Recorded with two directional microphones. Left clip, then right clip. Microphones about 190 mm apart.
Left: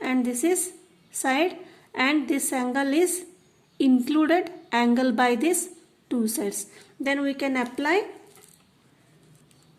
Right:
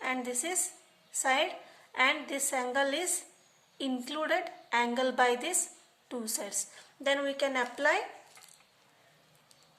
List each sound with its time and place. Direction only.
0.0 s a woman's voice: 35° left (ahead or behind)